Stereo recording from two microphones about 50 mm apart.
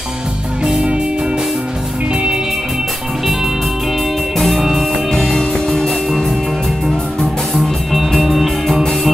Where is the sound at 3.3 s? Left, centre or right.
Centre.